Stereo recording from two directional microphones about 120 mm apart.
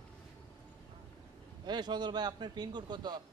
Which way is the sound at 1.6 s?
35° right (ahead or behind).